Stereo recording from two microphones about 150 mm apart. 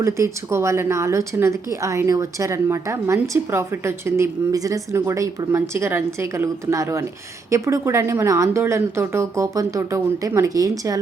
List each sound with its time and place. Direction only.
0.0 s a woman's voice: 20° right (ahead or behind)